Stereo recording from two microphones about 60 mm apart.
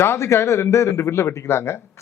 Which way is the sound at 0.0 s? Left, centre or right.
Left.